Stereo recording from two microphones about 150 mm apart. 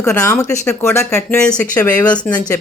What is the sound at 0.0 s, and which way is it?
Speech, 20° left (ahead or behind).